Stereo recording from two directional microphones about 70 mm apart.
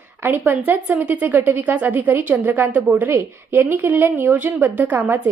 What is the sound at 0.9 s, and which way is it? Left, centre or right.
A woman's voice, centre.